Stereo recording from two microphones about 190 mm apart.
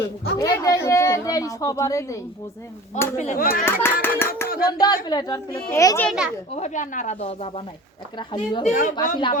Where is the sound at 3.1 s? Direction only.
45° left (ahead or behind).